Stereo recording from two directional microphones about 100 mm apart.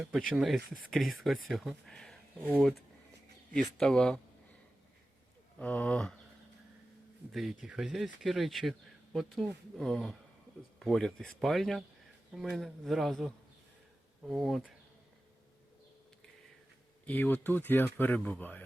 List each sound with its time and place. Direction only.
0.0 s speech: 5° right (ahead or behind); by 4.2 s 10° left (ahead or behind)
5.5 s speech: 15° left (ahead or behind)
7.3 s speech: 5° right (ahead or behind)
17.1 s speech: 20° left (ahead or behind)